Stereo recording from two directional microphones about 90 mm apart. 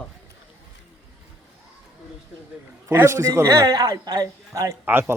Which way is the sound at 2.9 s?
30° right (ahead or behind).